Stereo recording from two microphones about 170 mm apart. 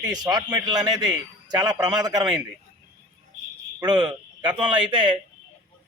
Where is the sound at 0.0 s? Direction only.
25° right (ahead or behind).